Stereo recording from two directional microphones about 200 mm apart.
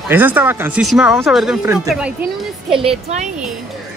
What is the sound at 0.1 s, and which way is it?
Speech, 10° right (ahead or behind).